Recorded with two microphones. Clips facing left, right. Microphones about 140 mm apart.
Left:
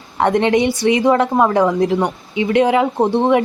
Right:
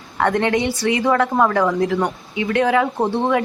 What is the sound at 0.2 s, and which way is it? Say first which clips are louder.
A woman's voice: left 4 dB; 20° left (ahead or behind).